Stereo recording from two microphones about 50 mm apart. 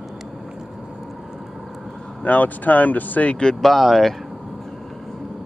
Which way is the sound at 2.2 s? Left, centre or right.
Left.